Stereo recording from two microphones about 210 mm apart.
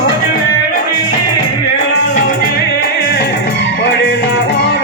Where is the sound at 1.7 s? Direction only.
40° left (ahead or behind).